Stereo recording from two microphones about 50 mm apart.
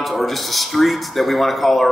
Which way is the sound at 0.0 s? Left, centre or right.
Centre.